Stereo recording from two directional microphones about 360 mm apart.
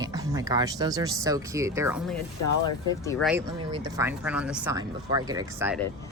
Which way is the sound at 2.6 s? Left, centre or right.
Centre.